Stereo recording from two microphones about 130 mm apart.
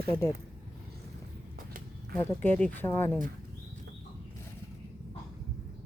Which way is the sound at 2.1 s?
15° left (ahead or behind).